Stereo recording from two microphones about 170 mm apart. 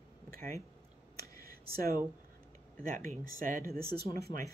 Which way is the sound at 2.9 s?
50° right (ahead or behind).